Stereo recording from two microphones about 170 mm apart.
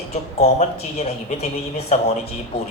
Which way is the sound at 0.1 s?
40° left (ahead or behind).